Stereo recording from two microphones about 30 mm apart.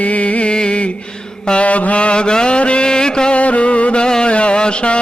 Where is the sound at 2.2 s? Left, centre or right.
Left.